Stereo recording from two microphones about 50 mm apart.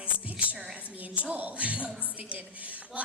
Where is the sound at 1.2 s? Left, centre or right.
Right.